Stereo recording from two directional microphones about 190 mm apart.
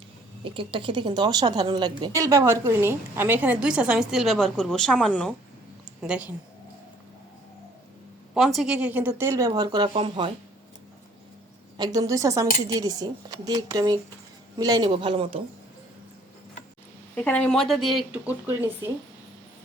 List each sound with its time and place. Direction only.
0.4 s speech: 25° right (ahead or behind); by 6.3 s 5° right (ahead or behind)
8.3 s speech: centre (ahead or behind); by 10.3 s 30° right (ahead or behind)
11.8 s speech: 20° right (ahead or behind)
17.2 s speech: 5° left (ahead or behind)